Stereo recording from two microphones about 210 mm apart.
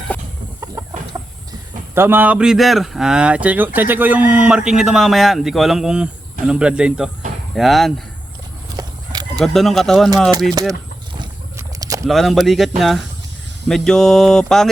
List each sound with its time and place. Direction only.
0.8 s chicken: 15° right (ahead or behind)
1.1 s a sound: 15° right (ahead or behind)
2.0 s speech: 10° right (ahead or behind)
8.7 s horse: 20° right (ahead or behind)
9.4 s speech: centre (ahead or behind)
10.5 s speech: 15° right (ahead or behind)
11.5 s vehicle: 15° right (ahead or behind)
12.0 s speech: centre (ahead or behind)